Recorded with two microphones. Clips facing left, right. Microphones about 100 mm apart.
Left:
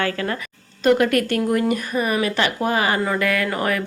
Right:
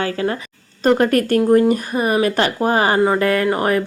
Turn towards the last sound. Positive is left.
turn(degrees=-35)  # may be behind; listen again after turning